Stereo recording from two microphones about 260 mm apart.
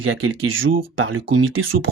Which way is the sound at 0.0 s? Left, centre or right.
Right.